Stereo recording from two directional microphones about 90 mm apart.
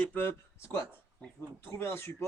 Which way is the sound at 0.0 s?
20° left (ahead or behind).